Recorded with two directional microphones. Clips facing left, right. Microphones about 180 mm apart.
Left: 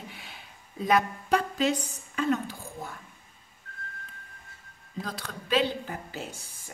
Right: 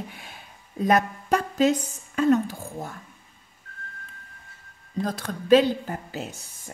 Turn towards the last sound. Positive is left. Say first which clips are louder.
# right 6 dB
turn(degrees=-45)  # may be behind; listen again after turning